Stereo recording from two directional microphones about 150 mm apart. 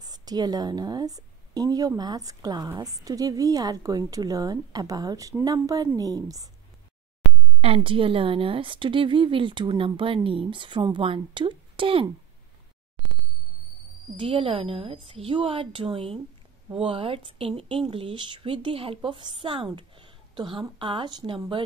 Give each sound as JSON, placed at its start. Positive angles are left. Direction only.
{"t": 0.0, "sound": "a woman's voice", "side_deg": -25}
{"t": 7.6, "sound": "a woman's voice", "side_deg": -35}
{"t": 14.1, "sound": "a woman's voice", "side_deg": -35}